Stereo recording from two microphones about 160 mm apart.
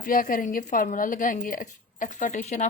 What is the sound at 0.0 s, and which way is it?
A woman's voice, 60° left (ahead or behind).